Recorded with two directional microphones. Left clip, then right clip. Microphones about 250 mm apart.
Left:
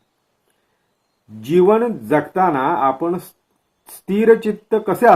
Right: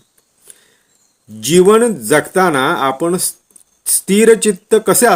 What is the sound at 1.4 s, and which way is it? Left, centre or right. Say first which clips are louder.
Speech: right 5 dB; right.